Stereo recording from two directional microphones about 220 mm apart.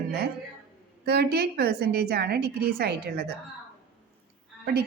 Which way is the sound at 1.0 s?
45° right (ahead or behind).